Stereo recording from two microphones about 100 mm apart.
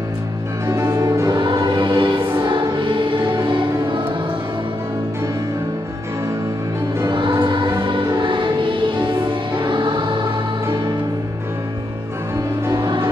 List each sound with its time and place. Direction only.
0.7 s music: 30° right (ahead or behind)
1.3 s choir: 55° right (ahead or behind)
2.8 s music: 55° right (ahead or behind)
7.1 s music: 55° right (ahead or behind)
12.6 s music: 30° right (ahead or behind)